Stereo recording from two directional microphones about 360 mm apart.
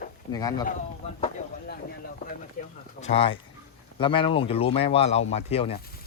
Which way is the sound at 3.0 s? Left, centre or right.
Centre.